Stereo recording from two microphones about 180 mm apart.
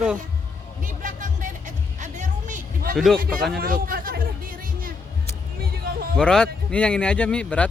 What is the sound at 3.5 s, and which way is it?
Music, 50° right (ahead or behind).